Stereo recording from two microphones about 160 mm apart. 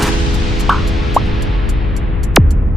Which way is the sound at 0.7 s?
Centre (ahead or behind).